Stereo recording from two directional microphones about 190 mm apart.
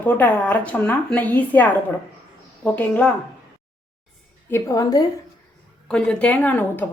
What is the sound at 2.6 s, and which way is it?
Speech, 10° left (ahead or behind).